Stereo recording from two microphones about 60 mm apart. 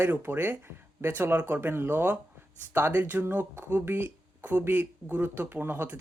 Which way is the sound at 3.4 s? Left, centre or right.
Right.